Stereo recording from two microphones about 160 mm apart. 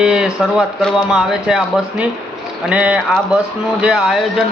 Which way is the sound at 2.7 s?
10° right (ahead or behind).